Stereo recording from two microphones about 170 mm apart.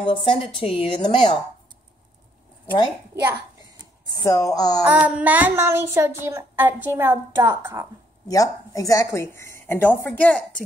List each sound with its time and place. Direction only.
0.0 s a woman's voice: 30° left (ahead or behind)
4.1 s a woman's voice: 20° left (ahead or behind)
4.8 s speech: 10° right (ahead or behind)
8.3 s speech: 20° left (ahead or behind)